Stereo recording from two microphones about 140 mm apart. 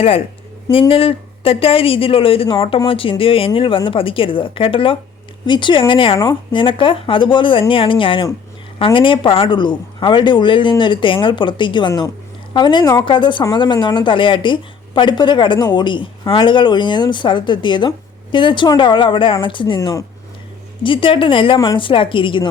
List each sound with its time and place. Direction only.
0.7 s a woman's voice: 40° left (ahead or behind)